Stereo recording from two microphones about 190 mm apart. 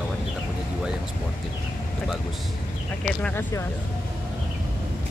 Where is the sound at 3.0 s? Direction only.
10° left (ahead or behind).